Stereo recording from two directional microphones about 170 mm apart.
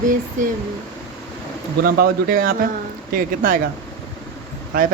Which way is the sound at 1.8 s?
60° right (ahead or behind).